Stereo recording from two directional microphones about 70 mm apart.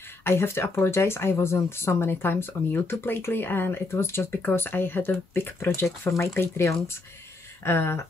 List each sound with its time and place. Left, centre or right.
0.2 s speech: left
6.0 s speech: left